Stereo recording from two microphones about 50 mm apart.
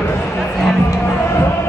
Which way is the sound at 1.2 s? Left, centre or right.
Left.